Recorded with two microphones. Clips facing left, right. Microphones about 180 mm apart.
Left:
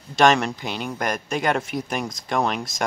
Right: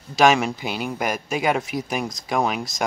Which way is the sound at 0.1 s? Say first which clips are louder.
Even; 5° right (ahead or behind).